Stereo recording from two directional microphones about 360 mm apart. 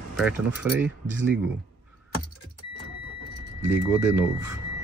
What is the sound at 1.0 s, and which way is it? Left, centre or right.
Speech, right.